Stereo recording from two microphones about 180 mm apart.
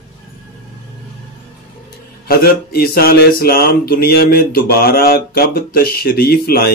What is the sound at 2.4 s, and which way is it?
Speech, 60° left (ahead or behind).